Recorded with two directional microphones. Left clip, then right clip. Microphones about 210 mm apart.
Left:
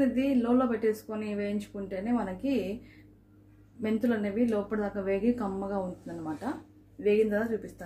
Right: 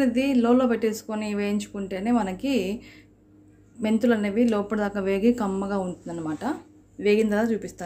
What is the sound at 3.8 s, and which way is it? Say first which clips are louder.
A woman's voice: right 7 dB; 35° right (ahead or behind).